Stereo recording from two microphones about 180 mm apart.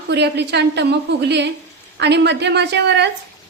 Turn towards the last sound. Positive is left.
turn(degrees=-70)  # may be behind; listen again after turning